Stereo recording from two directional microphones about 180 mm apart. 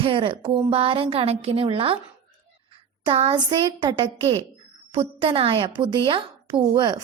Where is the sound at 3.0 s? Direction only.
30° right (ahead or behind).